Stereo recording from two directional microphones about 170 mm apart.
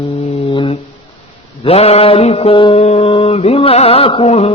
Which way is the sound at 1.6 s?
35° left (ahead or behind).